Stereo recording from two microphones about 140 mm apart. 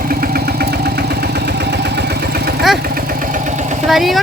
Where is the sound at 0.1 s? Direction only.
90° right.